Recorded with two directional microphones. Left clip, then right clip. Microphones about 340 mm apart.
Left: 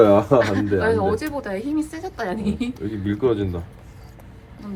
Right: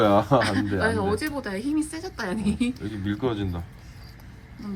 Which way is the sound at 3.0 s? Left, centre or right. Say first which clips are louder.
Left 7 dB; centre.